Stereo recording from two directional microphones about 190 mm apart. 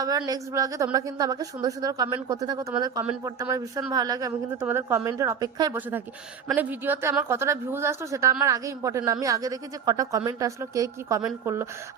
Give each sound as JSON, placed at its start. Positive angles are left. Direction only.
{"t": 0.3, "sound": "a woman's voice", "side_deg": -15}